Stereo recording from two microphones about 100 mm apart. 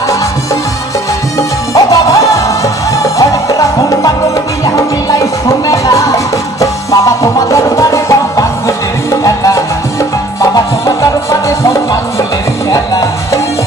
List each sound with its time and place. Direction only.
1.7 s music: 35° left (ahead or behind)